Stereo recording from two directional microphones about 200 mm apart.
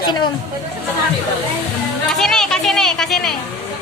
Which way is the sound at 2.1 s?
Centre (ahead or behind).